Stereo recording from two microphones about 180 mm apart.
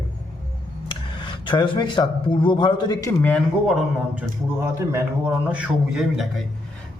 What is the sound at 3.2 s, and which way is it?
Speech, 5° left (ahead or behind).